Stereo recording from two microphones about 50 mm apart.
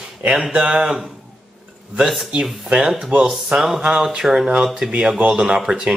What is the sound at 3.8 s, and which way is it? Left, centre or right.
Speech, centre.